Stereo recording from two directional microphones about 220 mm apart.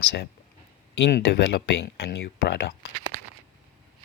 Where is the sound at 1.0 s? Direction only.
50° left (ahead or behind).